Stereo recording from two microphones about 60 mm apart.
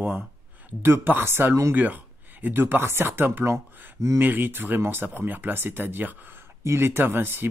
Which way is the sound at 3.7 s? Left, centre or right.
Right.